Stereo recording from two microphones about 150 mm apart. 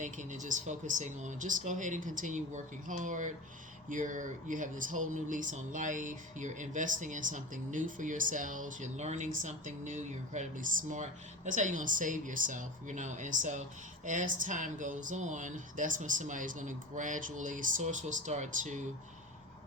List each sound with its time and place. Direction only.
0.0 s speech: 55° right (ahead or behind)